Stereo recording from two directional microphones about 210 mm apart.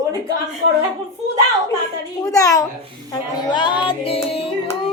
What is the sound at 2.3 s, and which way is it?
Speech, 15° left (ahead or behind).